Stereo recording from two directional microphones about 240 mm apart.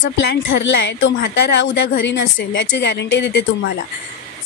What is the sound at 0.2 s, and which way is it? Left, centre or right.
A woman's voice, left.